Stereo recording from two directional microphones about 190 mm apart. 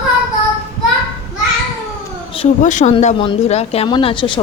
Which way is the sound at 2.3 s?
35° left (ahead or behind).